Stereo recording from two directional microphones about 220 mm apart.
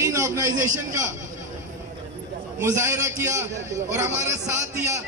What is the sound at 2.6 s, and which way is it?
A man's voice, 10° right (ahead or behind).